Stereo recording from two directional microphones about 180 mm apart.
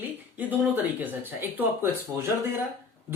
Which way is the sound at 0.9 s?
10° right (ahead or behind).